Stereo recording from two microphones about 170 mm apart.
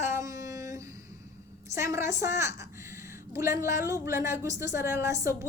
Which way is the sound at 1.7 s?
15° right (ahead or behind).